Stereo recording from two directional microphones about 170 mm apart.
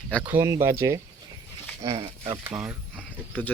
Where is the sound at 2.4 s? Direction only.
10° right (ahead or behind).